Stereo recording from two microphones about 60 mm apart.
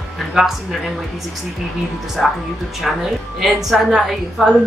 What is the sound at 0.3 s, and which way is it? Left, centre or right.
Speech, centre.